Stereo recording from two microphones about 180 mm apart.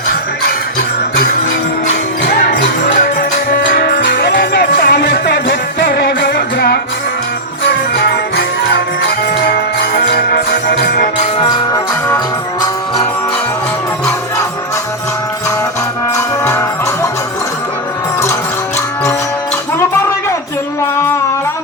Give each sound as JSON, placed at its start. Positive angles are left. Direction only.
{"t": 4.0, "sound": "music", "side_deg": 70}
{"t": 8.4, "sound": "music", "side_deg": 70}
{"t": 11.3, "sound": "music", "side_deg": 25}
{"t": 16.1, "sound": "music", "side_deg": 15}